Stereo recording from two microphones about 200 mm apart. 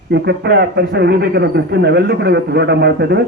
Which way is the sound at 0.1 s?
55° right (ahead or behind).